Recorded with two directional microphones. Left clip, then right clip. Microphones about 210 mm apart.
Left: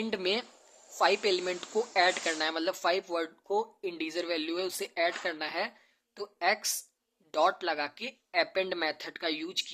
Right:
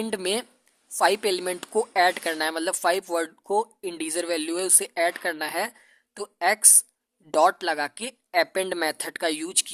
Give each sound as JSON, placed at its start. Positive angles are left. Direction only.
{"t": 0.0, "sound": "speech", "side_deg": -45}